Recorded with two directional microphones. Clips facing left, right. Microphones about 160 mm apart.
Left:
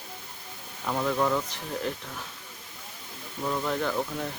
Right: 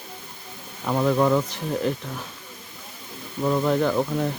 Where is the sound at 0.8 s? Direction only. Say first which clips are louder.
Right 6 dB; 25° right (ahead or behind).